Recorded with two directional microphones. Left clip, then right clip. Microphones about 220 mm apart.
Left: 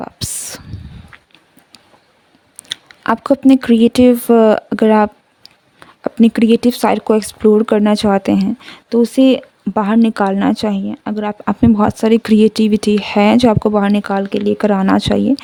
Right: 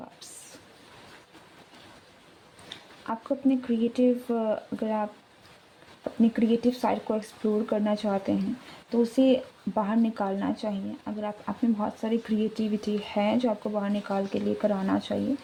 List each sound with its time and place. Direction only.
2.6 s speech: 55° left (ahead or behind)
6.1 s speech: 50° left (ahead or behind)